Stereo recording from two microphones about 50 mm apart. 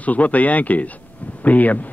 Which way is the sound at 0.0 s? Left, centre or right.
Left.